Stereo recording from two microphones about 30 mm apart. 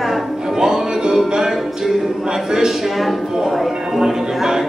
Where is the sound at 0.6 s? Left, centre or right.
Right.